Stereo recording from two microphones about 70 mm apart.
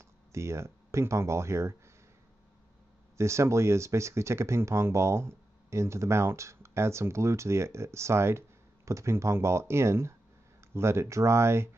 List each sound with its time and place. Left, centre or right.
0.0 s speech: right
3.2 s speech: right